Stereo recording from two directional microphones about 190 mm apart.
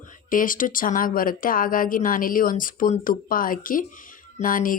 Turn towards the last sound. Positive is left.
turn(degrees=45)  # may be behind; listen again after turning